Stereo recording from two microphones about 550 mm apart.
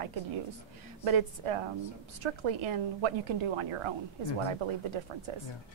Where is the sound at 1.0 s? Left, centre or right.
Right.